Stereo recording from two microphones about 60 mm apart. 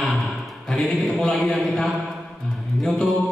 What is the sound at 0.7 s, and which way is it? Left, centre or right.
Mantra, centre.